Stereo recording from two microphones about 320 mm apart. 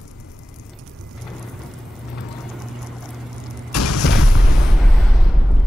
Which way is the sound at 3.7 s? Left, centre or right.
Left.